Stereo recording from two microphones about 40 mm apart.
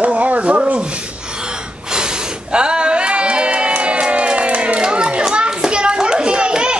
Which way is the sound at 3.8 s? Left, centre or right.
Right.